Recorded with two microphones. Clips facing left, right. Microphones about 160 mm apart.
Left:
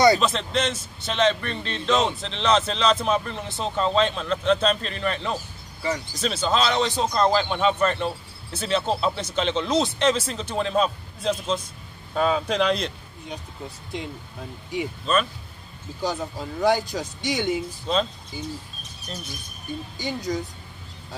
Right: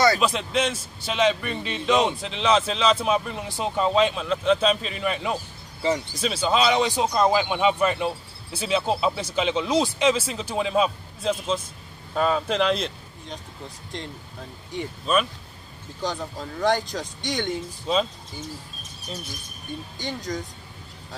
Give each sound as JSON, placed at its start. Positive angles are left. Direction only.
{"t": 0.2, "sound": "speech", "side_deg": -10}
{"t": 5.8, "sound": "speech", "side_deg": -25}
{"t": 6.1, "sound": "speech", "side_deg": -5}
{"t": 15.1, "sound": "speech", "side_deg": -5}
{"t": 16.0, "sound": "speech", "side_deg": 5}
{"t": 20.3, "sound": "speech", "side_deg": 10}